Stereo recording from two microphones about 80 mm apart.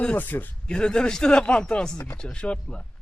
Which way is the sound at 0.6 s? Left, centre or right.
Centre.